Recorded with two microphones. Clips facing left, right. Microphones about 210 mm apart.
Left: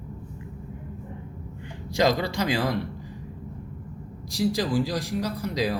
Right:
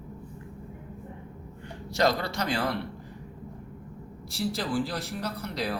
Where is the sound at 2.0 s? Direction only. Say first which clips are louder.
Left 3 dB; 15° left (ahead or behind).